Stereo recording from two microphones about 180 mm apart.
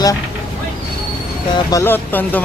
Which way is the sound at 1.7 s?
10° left (ahead or behind).